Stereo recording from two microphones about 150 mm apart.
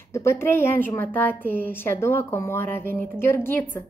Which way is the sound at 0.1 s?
15° left (ahead or behind).